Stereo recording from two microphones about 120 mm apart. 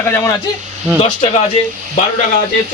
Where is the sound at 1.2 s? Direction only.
65° left (ahead or behind).